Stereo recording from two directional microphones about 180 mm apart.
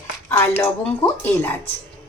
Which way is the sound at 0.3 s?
10° left (ahead or behind).